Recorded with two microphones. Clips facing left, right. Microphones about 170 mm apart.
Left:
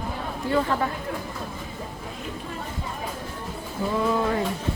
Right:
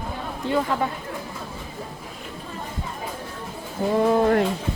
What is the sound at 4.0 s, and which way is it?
Speech, 45° right (ahead or behind).